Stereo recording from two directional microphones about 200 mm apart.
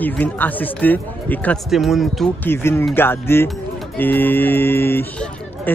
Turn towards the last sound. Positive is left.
turn(degrees=10)  # may be behind; listen again after turning